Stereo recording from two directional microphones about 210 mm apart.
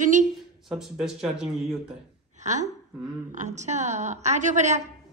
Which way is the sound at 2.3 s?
35° right (ahead or behind).